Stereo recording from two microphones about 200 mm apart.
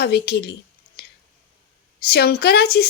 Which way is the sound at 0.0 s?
55° left (ahead or behind).